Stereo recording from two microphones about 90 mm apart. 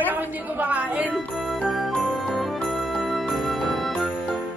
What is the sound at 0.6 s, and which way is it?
Speech, 15° right (ahead or behind).